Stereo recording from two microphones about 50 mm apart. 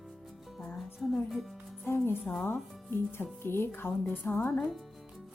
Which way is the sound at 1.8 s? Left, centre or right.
Left.